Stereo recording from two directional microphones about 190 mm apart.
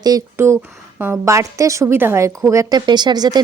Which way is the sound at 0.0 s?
15° right (ahead or behind).